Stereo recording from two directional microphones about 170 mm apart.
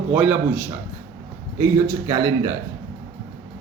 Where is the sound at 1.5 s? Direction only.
15° right (ahead or behind).